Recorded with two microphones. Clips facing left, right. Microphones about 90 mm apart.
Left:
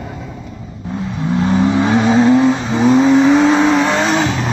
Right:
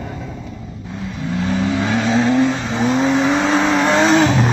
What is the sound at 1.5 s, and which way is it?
Vehicle, 30° left (ahead or behind).